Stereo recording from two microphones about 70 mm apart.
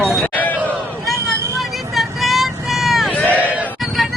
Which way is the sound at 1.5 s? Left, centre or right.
Centre.